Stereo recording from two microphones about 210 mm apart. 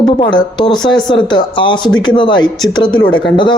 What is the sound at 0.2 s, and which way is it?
Speech, 20° left (ahead or behind).